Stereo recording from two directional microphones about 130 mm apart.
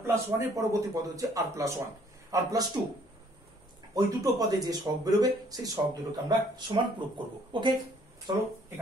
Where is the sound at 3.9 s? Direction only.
30° right (ahead or behind).